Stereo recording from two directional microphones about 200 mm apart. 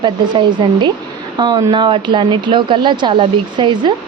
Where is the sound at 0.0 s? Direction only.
25° right (ahead or behind).